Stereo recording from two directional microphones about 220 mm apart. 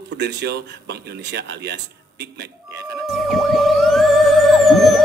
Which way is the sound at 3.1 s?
Centre (ahead or behind).